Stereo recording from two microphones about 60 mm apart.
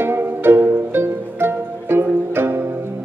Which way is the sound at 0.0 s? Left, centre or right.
Right.